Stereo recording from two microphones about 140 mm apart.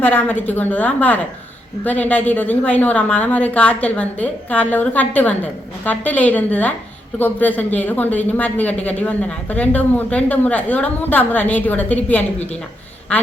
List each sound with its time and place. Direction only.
0.0 s speech: 15° left (ahead or behind)